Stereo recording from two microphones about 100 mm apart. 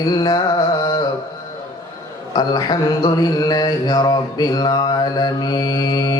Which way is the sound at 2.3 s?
45° left (ahead or behind).